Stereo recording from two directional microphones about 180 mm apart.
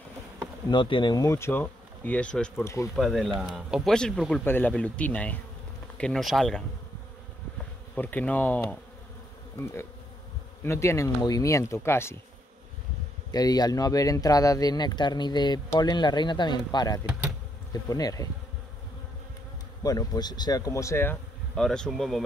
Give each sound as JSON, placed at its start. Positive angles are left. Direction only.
{"t": 0.7, "sound": "speech", "side_deg": 25}
{"t": 2.6, "sound": "speech", "side_deg": 15}
{"t": 3.0, "sound": "speech", "side_deg": 0}
{"t": 7.9, "sound": "speech", "side_deg": 10}
{"t": 13.3, "sound": "speech", "side_deg": 20}
{"t": 19.8, "sound": "speech", "side_deg": 20}